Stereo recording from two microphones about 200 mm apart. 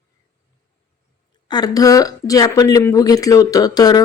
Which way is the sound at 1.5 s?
20° left (ahead or behind).